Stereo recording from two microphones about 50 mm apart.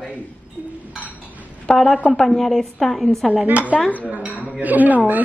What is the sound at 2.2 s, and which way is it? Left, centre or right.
A woman's voice, centre.